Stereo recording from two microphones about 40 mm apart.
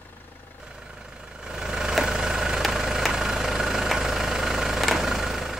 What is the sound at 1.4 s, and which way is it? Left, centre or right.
Vehicle, centre.